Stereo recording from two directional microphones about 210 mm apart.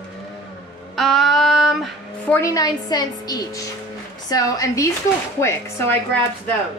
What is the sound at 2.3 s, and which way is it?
Speech, 15° left (ahead or behind).